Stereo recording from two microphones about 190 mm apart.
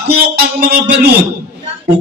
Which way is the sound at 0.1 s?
55° right (ahead or behind).